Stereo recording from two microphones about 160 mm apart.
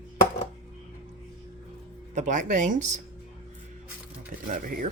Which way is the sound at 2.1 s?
50° right (ahead or behind).